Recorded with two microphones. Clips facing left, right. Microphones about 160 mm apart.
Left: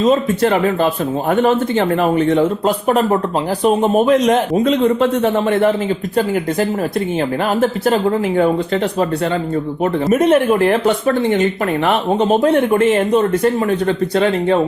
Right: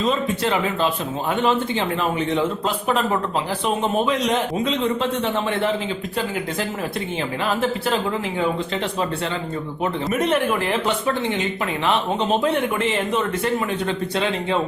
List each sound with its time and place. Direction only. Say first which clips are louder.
0.0 s speech: left 8 dB; 50° left (ahead or behind)
8.4 s speech: left 8 dB; 45° left (ahead or behind)